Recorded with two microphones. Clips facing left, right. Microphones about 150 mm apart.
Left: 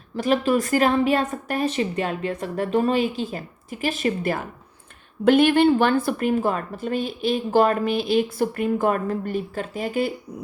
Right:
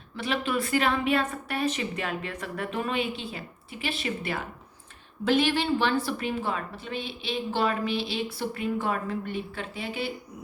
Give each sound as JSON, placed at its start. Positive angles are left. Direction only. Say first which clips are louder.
{"t": 0.2, "sound": "a woman's voice", "louder": "left 8 dB", "side_deg": 40}